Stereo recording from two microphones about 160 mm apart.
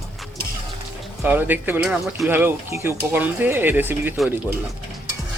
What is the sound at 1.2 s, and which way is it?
Speech, 10° right (ahead or behind).